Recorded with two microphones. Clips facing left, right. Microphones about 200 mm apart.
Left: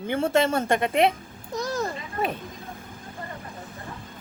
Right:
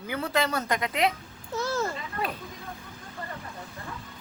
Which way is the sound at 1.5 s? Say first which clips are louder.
Left 1 dB; 15° left (ahead or behind).